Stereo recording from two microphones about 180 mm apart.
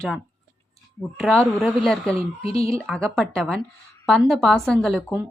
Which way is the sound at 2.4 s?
35° left (ahead or behind).